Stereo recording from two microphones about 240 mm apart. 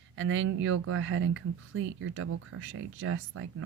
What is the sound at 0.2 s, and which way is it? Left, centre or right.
Speech, right.